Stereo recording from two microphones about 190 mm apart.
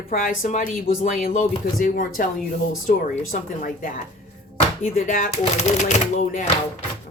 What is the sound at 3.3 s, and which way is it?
Speech, 45° left (ahead or behind).